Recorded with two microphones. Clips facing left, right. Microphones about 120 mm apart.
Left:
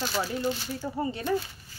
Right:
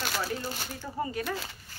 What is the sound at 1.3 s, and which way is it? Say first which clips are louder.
Speech: left 7 dB; 90° right.